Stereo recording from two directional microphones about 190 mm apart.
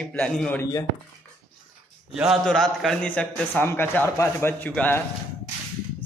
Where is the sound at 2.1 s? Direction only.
Centre (ahead or behind).